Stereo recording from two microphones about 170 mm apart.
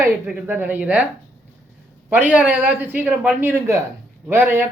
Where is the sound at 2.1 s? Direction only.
10° right (ahead or behind).